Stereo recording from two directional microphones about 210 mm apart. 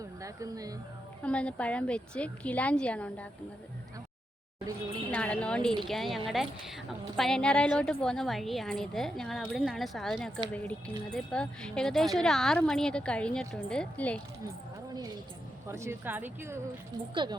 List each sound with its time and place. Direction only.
0.0 s a sound: 15° right (ahead or behind)
1.2 s speech: 5° left (ahead or behind)
5.1 s speech: 5° left (ahead or behind)
15.6 s a woman's voice: 15° right (ahead or behind)